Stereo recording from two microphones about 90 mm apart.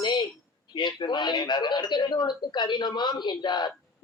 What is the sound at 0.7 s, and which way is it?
A man's voice, 55° left (ahead or behind).